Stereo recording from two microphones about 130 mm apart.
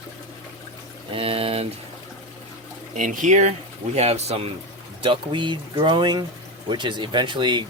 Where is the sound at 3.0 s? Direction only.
80° right; by 3.5 s 65° right (ahead or behind).